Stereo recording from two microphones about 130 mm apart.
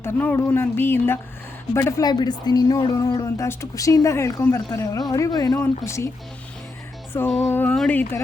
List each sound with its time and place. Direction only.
0.0 s a woman's voice: 15° left (ahead or behind)
7.3 s music: centre (ahead or behind)
7.5 s speech: 15° left (ahead or behind)